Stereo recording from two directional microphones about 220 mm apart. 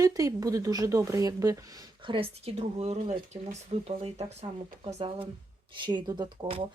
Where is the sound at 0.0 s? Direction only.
15° right (ahead or behind).